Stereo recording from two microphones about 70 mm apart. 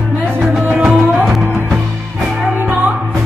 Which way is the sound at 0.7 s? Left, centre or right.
Centre.